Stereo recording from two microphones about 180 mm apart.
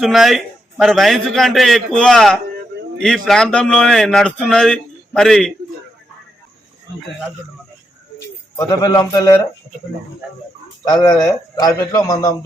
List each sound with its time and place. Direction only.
0.0 s speech: centre (ahead or behind)
8.5 s a man's voice: 20° left (ahead or behind)
10.8 s a man's voice: 25° left (ahead or behind)